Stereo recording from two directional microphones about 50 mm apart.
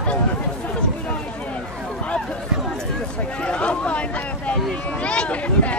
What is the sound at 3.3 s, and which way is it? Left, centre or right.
Speech, left.